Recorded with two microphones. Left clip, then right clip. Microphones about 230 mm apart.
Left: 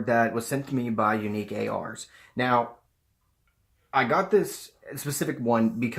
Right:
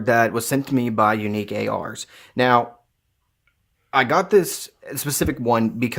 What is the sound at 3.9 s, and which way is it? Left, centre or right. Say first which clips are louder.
Speech: right 6 dB; right.